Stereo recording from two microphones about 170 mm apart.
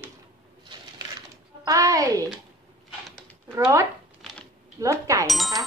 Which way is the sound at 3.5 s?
15° right (ahead or behind).